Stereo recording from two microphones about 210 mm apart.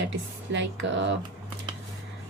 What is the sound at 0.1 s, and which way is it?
A woman's voice, 60° right (ahead or behind).